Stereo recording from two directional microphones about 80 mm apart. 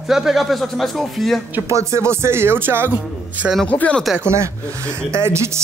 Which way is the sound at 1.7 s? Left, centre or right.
Right.